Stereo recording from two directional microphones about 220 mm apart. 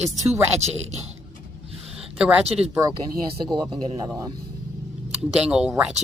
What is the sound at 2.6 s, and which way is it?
Speech, 10° right (ahead or behind).